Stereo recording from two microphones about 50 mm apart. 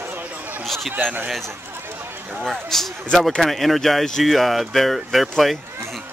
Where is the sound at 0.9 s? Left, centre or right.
Right.